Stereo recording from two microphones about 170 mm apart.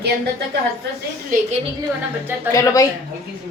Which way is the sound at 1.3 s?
55° right (ahead or behind).